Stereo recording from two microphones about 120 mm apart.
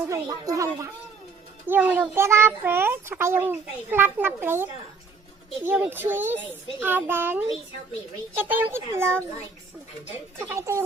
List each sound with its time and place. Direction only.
0.1 s a child's voice: 30° right (ahead or behind)
1.6 s a child's voice: 15° right (ahead or behind)
5.7 s a child's voice: 10° right (ahead or behind)
10.3 s a child's voice: 25° right (ahead or behind)